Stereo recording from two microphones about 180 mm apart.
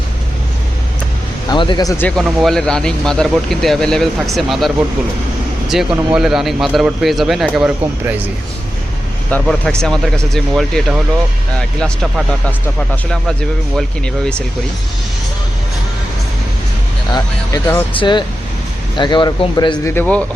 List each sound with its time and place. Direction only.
1.5 s speech: 25° left (ahead or behind)
2.0 s speech: centre (ahead or behind)
9.3 s speech: 5° left (ahead or behind)
17.1 s speech: 20° left (ahead or behind)
17.9 s speech: 25° left (ahead or behind)
19.9 s speech: 10° left (ahead or behind)